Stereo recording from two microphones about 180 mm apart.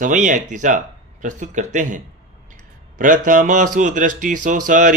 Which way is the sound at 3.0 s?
45° right (ahead or behind).